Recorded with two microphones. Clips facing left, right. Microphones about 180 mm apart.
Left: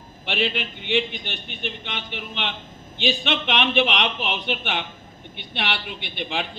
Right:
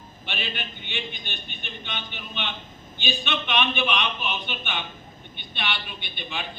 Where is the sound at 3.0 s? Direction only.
90° left.